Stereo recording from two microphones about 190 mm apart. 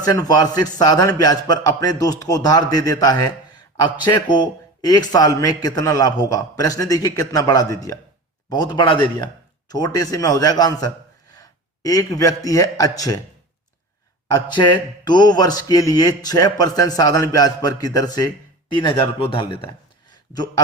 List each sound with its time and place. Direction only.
0.0 s a man's voice: 20° left (ahead or behind)
14.3 s a man's voice: 20° left (ahead or behind)